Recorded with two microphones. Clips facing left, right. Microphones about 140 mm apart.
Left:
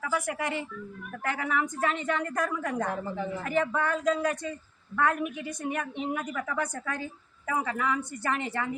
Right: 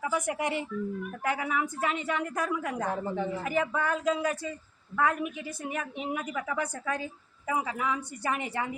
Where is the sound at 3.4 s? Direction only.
10° right (ahead or behind).